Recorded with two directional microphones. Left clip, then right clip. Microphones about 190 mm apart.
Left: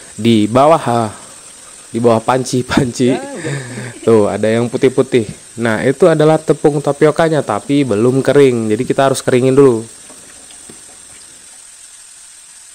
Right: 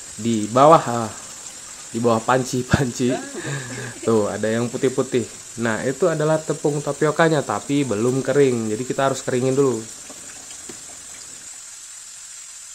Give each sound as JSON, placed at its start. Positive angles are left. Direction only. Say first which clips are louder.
{"t": 0.2, "sound": "speech", "louder": "left 5 dB", "side_deg": 45}
{"t": 8.2, "sound": "speech", "louder": "left 8 dB", "side_deg": 45}